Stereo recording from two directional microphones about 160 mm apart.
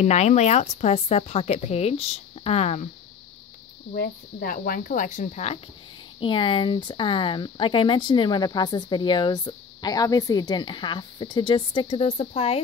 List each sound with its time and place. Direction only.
0.0 s speech: 45° left (ahead or behind)
3.9 s speech: 70° left (ahead or behind); by 5.6 s 45° left (ahead or behind)
6.1 s speech: 30° left (ahead or behind)